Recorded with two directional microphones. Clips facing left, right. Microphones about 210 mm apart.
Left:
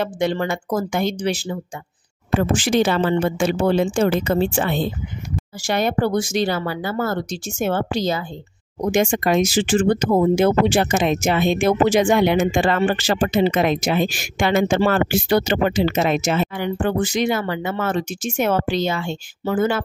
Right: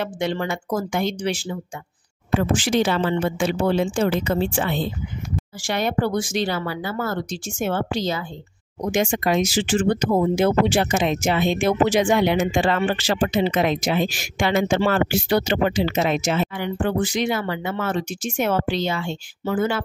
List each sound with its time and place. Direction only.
0.0 s speech: 40° left (ahead or behind)